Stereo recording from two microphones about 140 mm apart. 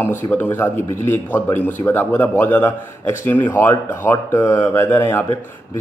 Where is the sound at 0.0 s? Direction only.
15° left (ahead or behind).